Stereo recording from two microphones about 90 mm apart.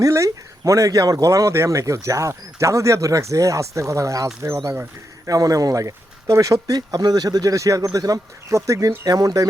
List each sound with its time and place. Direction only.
0.0 s speech: 35° right (ahead or behind)
5.3 s speech: 40° right (ahead or behind)